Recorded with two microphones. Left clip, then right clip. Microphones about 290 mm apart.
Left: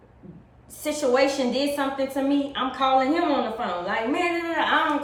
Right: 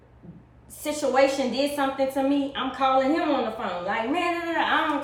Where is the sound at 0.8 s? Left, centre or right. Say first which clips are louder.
Even; centre.